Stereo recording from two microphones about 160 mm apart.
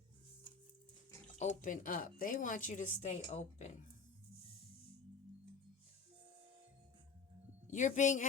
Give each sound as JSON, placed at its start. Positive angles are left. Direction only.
{"t": 1.4, "sound": "a woman's voice", "side_deg": 50}
{"t": 7.7, "sound": "a woman's voice", "side_deg": 50}